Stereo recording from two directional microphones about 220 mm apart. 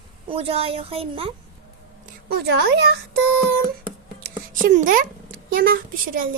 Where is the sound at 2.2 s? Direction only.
50° right (ahead or behind).